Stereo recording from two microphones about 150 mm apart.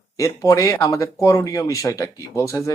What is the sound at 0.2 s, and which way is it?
Speech, 20° left (ahead or behind).